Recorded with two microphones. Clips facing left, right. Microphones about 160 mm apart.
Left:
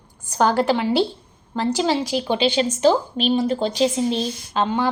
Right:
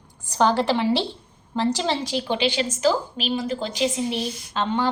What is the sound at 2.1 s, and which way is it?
Speech, 20° left (ahead or behind).